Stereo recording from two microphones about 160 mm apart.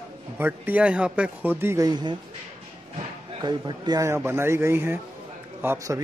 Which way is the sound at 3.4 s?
30° right (ahead or behind).